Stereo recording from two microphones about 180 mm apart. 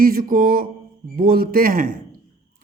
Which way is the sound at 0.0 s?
50° right (ahead or behind).